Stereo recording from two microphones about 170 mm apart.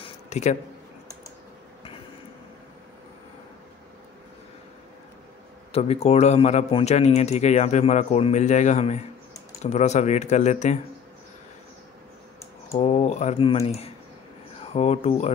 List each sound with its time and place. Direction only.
0.0 s a sound: 40° left (ahead or behind)
5.7 s a man's voice: 40° left (ahead or behind)
12.7 s a man's voice: 40° left (ahead or behind)